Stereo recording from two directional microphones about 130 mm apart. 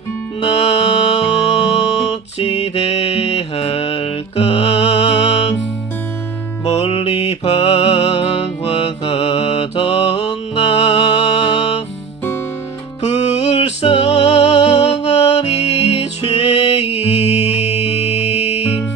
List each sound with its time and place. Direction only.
0.4 s music: 50° left (ahead or behind)
6.6 s music: 55° left (ahead or behind)
13.0 s music: 55° left (ahead or behind)